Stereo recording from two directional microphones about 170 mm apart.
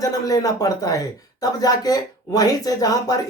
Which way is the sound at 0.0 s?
20° left (ahead or behind).